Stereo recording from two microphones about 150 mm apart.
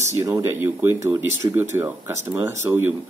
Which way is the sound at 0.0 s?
20° right (ahead or behind).